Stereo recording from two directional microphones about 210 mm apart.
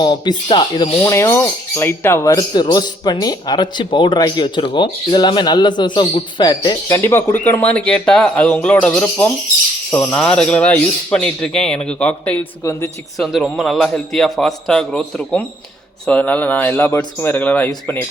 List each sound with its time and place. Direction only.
0.0 s a man's voice: 20° left (ahead or behind)
13.1 s a man's voice: centre (ahead or behind)